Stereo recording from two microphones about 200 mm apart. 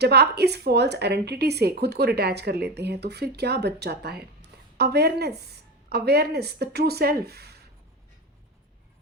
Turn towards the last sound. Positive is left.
turn(degrees=-55)  # may be behind; listen again after turning